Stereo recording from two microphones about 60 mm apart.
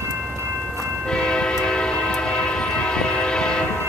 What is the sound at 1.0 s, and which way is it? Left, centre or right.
Train, centre.